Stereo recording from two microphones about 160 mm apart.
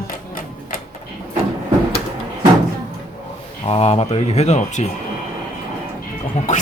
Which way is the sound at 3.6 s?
40° left (ahead or behind).